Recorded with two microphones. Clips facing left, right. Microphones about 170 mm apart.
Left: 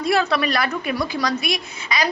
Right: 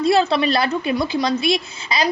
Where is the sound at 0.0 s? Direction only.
25° right (ahead or behind).